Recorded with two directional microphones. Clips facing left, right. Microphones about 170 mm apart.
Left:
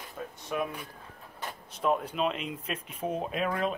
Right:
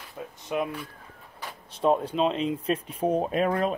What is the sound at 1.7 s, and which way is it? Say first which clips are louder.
Speech: right 5 dB; 30° right (ahead or behind).